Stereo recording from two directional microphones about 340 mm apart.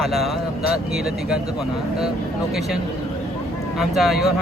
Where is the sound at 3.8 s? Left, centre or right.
Centre.